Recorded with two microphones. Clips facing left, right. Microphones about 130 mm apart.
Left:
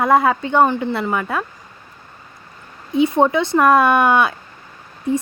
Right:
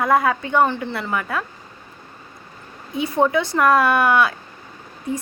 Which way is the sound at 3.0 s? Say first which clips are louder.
Left 4 dB; 20° left (ahead or behind).